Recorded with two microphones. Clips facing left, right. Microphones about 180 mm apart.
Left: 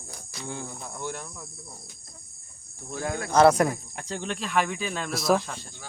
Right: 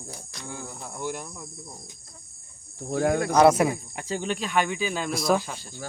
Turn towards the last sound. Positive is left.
turn(degrees=0)  # may be behind; listen again after turning